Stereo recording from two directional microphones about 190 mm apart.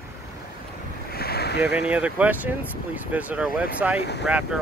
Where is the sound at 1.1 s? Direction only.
55° left (ahead or behind).